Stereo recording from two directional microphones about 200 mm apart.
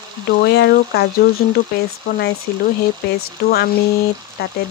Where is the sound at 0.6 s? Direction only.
55° left (ahead or behind).